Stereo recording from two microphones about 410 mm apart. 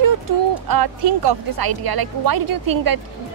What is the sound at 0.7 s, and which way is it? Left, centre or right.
Speech, right.